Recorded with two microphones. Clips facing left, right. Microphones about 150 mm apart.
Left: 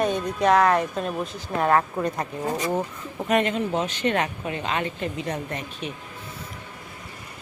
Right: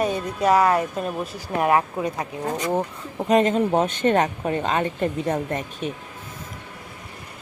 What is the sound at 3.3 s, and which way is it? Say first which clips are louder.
Speech: right 4 dB; 35° right (ahead or behind).